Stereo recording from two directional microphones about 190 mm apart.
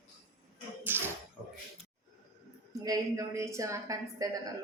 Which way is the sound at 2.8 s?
15° right (ahead or behind).